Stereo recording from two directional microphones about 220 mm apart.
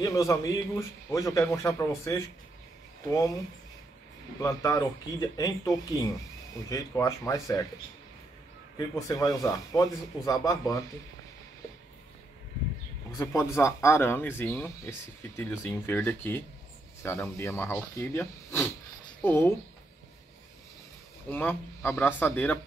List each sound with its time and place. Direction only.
0.0 s speech: 15° left (ahead or behind)
4.4 s speech: 15° left (ahead or behind)
6.7 s speech: 15° left (ahead or behind)
8.7 s speech: 15° left (ahead or behind)
13.2 s speech: 10° left (ahead or behind)
21.3 s speech: 10° left (ahead or behind)